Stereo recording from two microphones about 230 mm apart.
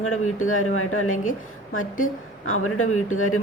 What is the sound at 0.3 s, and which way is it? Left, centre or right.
Speech, left.